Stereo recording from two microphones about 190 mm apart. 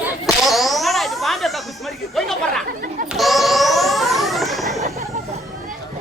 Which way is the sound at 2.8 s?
45° right (ahead or behind).